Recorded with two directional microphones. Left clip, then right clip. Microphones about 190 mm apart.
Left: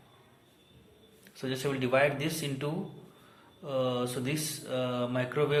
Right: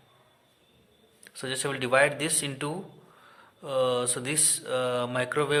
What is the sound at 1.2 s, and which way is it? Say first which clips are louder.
Speech: right 2 dB; 40° right (ahead or behind).